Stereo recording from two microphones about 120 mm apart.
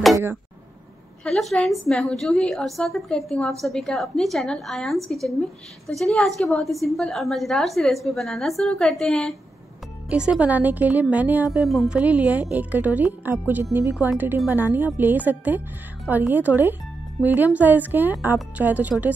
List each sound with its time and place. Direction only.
0.1 s a sound: 20° right (ahead or behind)
1.2 s a woman's voice: 5° left (ahead or behind)
10.0 s speech: 10° right (ahead or behind)
11.6 s a woman's voice: centre (ahead or behind)
12.0 s speech: 10° right (ahead or behind)